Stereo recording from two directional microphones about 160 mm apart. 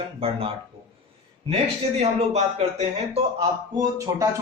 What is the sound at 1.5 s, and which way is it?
Speech, 40° right (ahead or behind).